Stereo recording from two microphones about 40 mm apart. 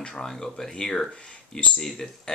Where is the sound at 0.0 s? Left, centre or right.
Centre.